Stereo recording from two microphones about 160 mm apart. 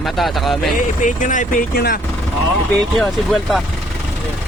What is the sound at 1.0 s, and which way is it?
Speech, 50° left (ahead or behind).